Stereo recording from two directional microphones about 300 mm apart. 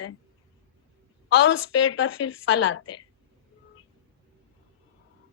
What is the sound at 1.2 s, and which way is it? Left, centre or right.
A woman's voice, left.